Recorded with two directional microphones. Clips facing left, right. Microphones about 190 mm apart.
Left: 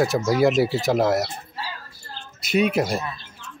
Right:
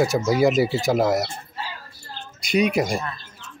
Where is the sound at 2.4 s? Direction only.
5° left (ahead or behind).